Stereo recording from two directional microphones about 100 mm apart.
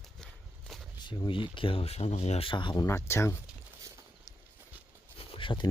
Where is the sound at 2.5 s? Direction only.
55° left (ahead or behind).